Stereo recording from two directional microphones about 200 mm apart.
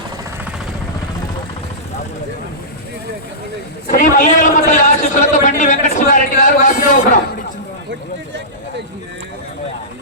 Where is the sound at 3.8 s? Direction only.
40° left (ahead or behind).